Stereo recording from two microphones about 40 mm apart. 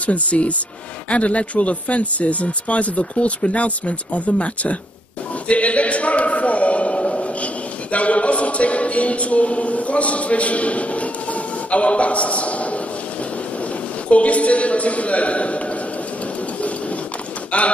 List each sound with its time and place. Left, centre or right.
0.0 s speech: left
5.5 s a sound: left
7.9 s a man's voice: left
14.1 s speech: left
17.5 s clip-clop: left